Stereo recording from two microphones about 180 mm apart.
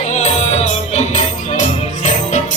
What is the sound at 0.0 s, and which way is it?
Music, 40° left (ahead or behind).